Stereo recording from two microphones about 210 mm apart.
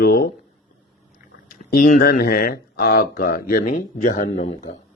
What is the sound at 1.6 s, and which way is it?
Speech, 45° left (ahead or behind).